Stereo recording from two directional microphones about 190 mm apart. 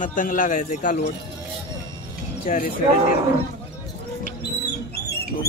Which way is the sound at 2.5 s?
45° left (ahead or behind).